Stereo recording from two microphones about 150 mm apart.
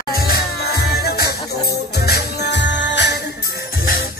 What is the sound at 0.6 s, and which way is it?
Music, 90° left.